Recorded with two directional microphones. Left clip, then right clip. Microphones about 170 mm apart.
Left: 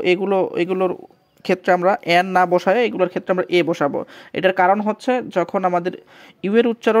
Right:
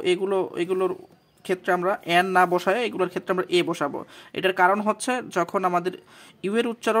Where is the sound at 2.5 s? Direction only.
25° left (ahead or behind).